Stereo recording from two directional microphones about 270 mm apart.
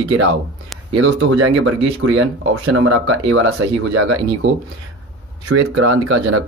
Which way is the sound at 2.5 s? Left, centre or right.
Right.